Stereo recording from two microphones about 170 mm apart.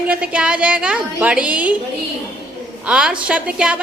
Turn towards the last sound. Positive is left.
turn(degrees=-5)  # may be behind; listen again after turning